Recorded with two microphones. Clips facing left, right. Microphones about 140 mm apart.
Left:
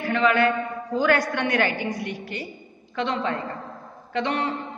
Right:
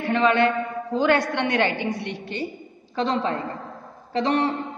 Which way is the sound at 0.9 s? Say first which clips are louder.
Right 1 dB; 25° right (ahead or behind).